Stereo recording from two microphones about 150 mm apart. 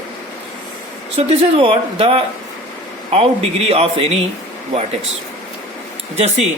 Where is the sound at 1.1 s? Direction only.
40° right (ahead or behind).